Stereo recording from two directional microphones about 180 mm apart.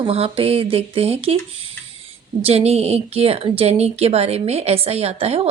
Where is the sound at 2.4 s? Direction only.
35° right (ahead or behind).